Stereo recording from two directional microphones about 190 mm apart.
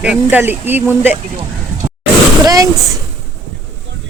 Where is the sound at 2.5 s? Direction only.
20° right (ahead or behind).